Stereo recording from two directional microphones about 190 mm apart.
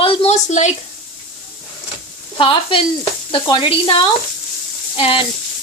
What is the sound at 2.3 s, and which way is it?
Speech, 25° left (ahead or behind).